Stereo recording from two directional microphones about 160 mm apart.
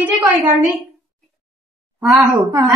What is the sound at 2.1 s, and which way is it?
Speech, 20° right (ahead or behind).